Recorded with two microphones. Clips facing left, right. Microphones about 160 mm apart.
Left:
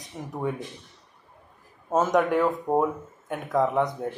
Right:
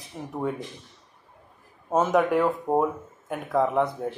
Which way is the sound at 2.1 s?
5° right (ahead or behind).